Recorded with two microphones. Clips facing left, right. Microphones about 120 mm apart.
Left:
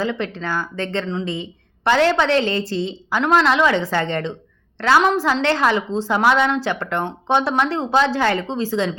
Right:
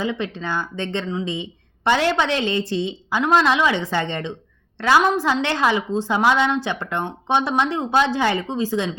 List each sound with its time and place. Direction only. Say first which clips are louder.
0.0 s speech: left 2 dB; 20° right (ahead or behind)